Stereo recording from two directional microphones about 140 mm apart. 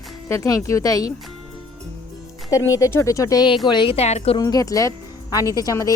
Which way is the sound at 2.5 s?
25° left (ahead or behind).